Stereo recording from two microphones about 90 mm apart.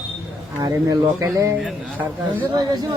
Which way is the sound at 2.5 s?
50° right (ahead or behind).